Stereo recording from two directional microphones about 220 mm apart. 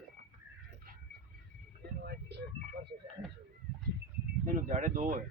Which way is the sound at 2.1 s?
50° right (ahead or behind).